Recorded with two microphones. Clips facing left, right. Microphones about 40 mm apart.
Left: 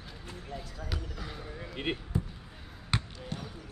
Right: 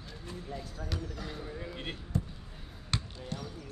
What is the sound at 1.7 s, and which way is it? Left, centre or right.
Basketball bounce, left.